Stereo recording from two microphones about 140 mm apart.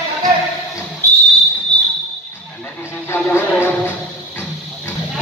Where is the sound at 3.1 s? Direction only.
15° left (ahead or behind).